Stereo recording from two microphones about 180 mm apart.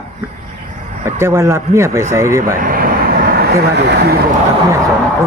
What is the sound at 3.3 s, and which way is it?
Vehicle, 60° right (ahead or behind).